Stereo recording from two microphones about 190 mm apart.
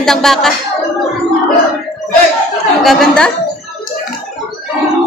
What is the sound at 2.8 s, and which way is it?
Speech, centre (ahead or behind).